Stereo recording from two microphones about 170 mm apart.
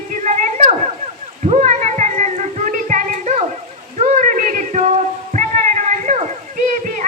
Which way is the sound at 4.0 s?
45° right (ahead or behind).